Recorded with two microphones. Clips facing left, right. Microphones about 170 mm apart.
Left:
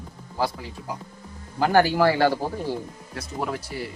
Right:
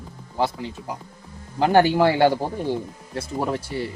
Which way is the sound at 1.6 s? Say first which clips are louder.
Right 2 dB; 20° right (ahead or behind).